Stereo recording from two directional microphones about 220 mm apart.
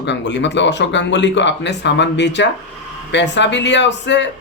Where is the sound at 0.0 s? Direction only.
50° left (ahead or behind).